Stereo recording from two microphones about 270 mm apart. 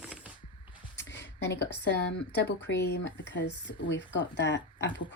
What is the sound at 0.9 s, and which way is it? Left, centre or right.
Speech, left.